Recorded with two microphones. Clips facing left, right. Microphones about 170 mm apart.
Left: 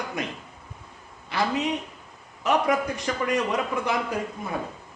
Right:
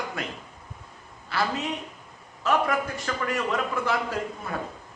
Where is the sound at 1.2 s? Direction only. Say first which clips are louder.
Left 3 dB; 20° left (ahead or behind).